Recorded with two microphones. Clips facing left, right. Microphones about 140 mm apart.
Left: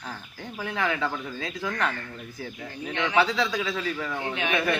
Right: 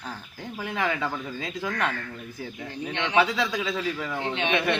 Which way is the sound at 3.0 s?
20° right (ahead or behind).